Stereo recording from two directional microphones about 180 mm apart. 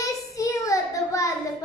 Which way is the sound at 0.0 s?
15° left (ahead or behind).